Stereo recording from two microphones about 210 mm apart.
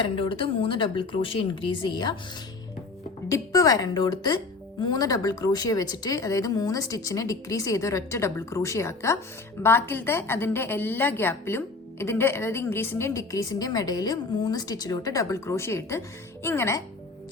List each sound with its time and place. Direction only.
0.0 s speech: 25° left (ahead or behind)
3.2 s a woman's voice: 15° left (ahead or behind)